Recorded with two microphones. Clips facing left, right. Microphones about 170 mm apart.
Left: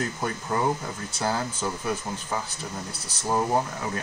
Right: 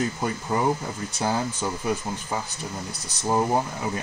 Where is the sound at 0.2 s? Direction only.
10° right (ahead or behind).